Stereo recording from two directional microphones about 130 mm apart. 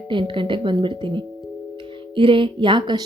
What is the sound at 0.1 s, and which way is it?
A woman's voice, 40° right (ahead or behind).